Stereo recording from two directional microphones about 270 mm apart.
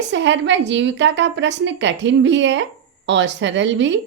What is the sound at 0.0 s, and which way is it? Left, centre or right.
A woman's voice, right.